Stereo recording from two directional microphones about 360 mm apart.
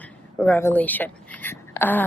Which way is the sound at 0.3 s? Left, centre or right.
Centre.